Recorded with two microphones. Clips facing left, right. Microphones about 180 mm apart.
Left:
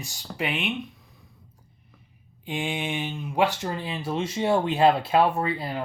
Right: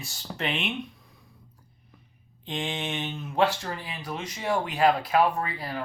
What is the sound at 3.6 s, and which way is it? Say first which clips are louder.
Speech: left 5 dB; 20° left (ahead or behind).